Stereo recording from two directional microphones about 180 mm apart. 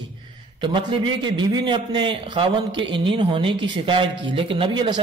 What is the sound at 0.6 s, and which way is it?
A man's voice, 25° right (ahead or behind).